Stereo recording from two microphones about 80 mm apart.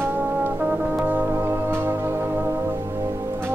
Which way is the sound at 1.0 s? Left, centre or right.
Right.